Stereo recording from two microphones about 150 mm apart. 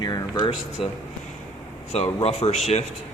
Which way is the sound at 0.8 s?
40° left (ahead or behind).